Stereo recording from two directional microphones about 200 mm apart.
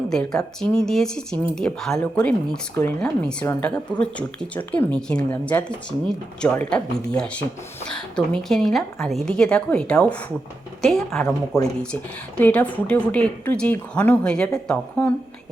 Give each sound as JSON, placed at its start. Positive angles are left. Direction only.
{"t": 0.1, "sound": "a woman's voice", "side_deg": 5}
{"t": 12.4, "sound": "speech", "side_deg": 5}